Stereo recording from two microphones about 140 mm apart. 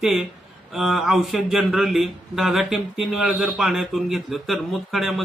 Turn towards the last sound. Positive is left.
turn(degrees=0)  # may be behind; listen again after turning